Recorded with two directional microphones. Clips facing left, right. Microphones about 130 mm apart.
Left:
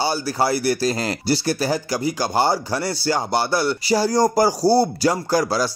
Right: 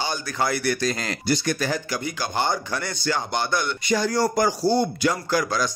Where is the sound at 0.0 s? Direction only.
35° left (ahead or behind).